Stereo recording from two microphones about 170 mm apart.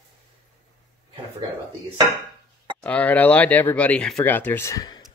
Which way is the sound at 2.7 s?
10° left (ahead or behind).